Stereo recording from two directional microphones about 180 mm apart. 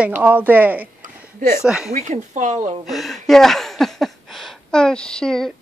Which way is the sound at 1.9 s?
40° right (ahead or behind).